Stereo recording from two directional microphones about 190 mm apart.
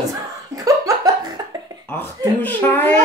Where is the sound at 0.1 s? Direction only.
20° right (ahead or behind).